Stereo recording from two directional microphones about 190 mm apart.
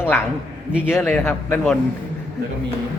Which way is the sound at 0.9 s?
10° left (ahead or behind).